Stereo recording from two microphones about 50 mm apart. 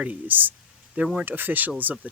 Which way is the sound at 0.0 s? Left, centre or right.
Right.